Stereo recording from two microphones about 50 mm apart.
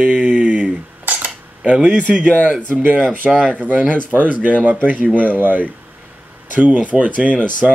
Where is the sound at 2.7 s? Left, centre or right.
Right.